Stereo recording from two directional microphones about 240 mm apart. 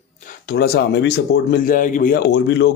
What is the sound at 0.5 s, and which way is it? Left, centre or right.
Speech, left.